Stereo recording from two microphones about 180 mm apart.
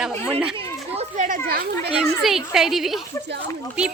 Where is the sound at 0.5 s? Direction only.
35° right (ahead or behind).